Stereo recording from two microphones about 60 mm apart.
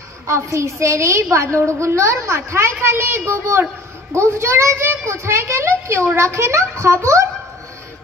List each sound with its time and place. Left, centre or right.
0.3 s a woman's voice: right